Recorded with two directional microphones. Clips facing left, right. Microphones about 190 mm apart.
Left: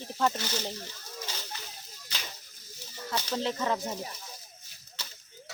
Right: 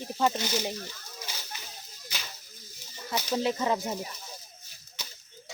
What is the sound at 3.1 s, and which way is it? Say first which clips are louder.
Speech: right 3 dB; 10° right (ahead or behind).